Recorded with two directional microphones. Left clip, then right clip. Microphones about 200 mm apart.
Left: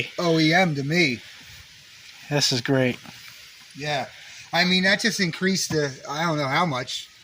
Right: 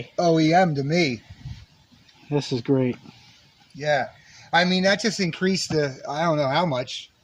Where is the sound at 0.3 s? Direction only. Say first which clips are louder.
Left 1 dB; 5° right (ahead or behind).